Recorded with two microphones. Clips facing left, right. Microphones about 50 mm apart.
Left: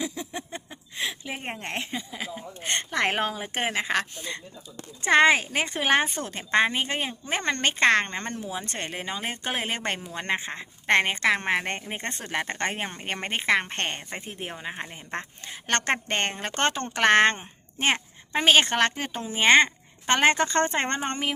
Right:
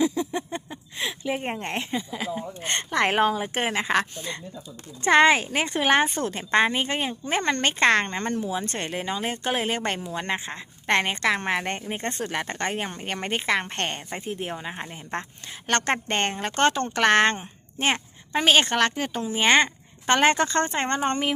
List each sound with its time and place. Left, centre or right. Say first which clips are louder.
0.0 s a sound: right 8 dB; centre
1.5 s speech: right 3 dB; centre
8.1 s a woman's voice: right 5 dB; centre
16.6 s a woman's voice: right 3 dB; centre
20.1 s a woman's voice: right 1 dB; centre